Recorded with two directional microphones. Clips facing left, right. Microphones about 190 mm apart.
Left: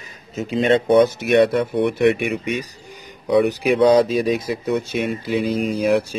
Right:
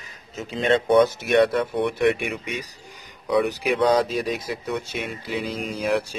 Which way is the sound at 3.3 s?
25° left (ahead or behind).